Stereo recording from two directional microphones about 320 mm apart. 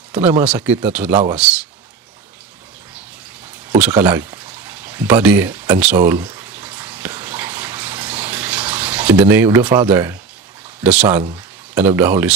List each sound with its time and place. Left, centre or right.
0.1 s speech: centre
1.1 s speech: centre
3.7 s pour: centre
10.8 s speech: centre